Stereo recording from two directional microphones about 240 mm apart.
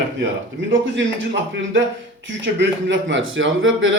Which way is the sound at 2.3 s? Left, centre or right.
Right.